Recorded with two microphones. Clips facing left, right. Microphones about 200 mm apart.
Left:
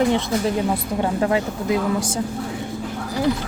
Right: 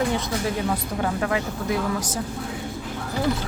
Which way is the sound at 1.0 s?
25° left (ahead or behind).